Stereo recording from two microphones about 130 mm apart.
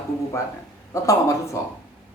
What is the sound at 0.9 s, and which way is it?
Speech, 25° left (ahead or behind).